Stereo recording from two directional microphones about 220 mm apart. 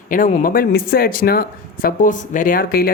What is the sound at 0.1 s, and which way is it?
Speech, 40° left (ahead or behind).